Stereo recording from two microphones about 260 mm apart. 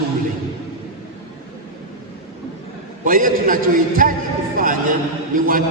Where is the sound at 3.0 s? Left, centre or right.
Right.